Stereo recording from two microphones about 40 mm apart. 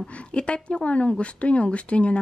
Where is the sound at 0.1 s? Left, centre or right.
Left.